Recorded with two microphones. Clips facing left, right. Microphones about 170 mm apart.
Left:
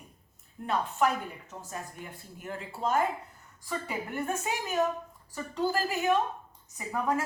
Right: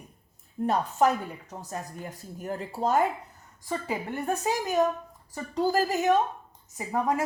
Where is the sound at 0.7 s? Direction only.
40° right (ahead or behind).